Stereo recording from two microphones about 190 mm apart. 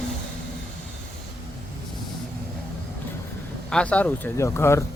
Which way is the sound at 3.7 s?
5° left (ahead or behind).